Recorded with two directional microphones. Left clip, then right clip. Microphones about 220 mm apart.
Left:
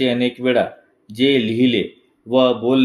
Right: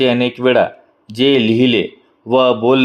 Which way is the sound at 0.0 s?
25° right (ahead or behind).